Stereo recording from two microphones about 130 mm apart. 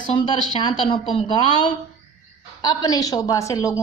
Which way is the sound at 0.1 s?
35° left (ahead or behind).